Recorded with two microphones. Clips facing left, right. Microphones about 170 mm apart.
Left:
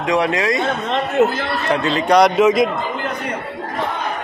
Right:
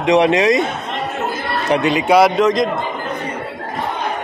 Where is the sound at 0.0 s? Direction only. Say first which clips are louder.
Right 5 dB; 20° right (ahead or behind).